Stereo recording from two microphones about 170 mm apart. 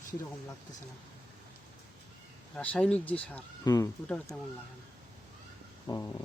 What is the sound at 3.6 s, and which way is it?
Speech, 20° left (ahead or behind).